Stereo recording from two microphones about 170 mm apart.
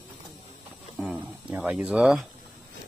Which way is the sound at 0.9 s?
Centre (ahead or behind).